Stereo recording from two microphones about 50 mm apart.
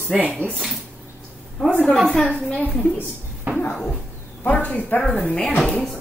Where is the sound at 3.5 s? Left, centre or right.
Right.